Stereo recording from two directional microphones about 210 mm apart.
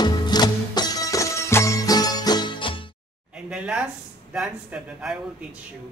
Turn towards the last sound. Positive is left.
turn(degrees=-5)  # may be behind; listen again after turning